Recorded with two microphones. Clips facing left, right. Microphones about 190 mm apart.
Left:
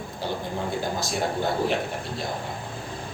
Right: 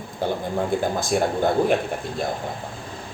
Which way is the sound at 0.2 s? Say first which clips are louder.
Right 6 dB; 50° right (ahead or behind).